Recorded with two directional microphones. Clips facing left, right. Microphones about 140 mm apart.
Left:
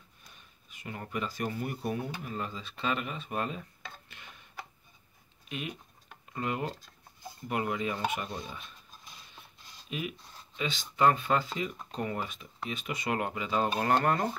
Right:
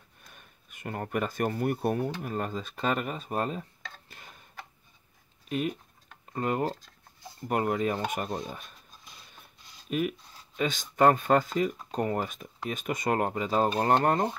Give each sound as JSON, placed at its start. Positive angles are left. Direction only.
{"t": 0.2, "sound": "speech", "side_deg": -55}
{"t": 4.1, "sound": "a sound", "side_deg": -40}
{"t": 5.5, "sound": "speech", "side_deg": -45}
{"t": 9.8, "sound": "speech", "side_deg": -50}